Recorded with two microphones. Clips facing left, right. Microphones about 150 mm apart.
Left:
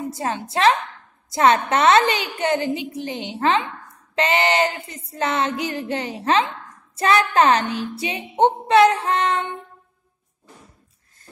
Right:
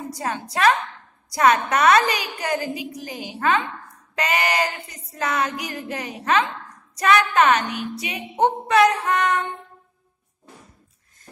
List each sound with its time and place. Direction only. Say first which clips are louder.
0.1 s speech: left 2 dB; 25° left (ahead or behind)